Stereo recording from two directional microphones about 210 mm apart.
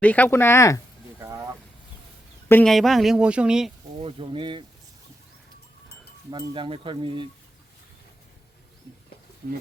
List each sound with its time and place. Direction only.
0.0 s speech: 5° left (ahead or behind)
1.2 s vehicle: 15° right (ahead or behind)
2.5 s speech: 5° left (ahead or behind)
4.0 s stir: 25° right (ahead or behind)
6.3 s stir: 25° right (ahead or behind)
9.4 s speech: 45° right (ahead or behind)